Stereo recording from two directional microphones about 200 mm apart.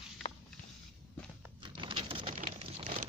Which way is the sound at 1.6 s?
25° right (ahead or behind).